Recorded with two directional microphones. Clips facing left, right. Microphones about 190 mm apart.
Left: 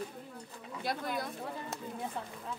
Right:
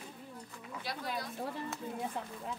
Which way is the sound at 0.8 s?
50° left (ahead or behind).